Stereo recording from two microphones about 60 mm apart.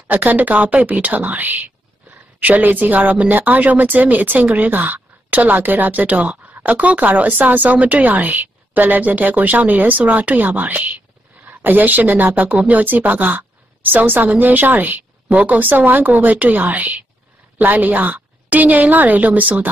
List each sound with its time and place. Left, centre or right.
0.1 s a woman's voice: right